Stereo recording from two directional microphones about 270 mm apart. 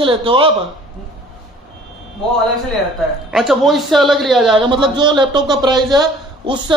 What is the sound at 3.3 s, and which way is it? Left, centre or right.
A man's voice, centre.